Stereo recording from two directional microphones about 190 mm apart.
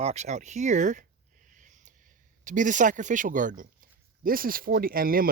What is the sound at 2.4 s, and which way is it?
Speech, 40° right (ahead or behind).